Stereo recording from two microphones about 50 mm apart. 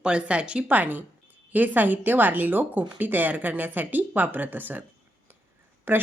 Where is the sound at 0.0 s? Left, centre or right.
Right.